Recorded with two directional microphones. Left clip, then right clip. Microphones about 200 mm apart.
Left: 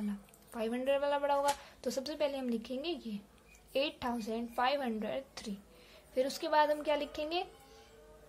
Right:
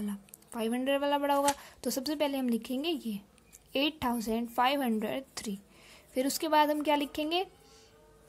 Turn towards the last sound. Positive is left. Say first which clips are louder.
# right 5 dB
turn(degrees=-40)  # may be behind; listen again after turning